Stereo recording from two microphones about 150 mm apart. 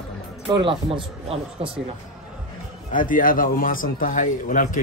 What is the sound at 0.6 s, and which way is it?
Speech, 35° right (ahead or behind).